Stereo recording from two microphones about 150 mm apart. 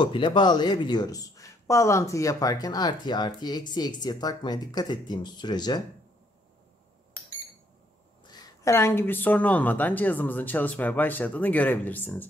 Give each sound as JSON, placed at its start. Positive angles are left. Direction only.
{"t": 0.0, "sound": "speech", "side_deg": 30}
{"t": 8.2, "sound": "a woman's voice", "side_deg": 25}